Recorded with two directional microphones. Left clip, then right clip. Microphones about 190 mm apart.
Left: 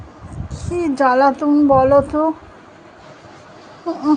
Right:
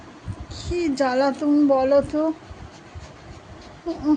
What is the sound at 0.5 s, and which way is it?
Speech, 10° left (ahead or behind).